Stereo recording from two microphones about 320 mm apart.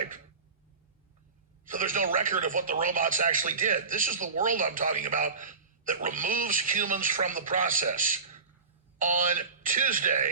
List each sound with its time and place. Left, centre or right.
1.6 s speech: right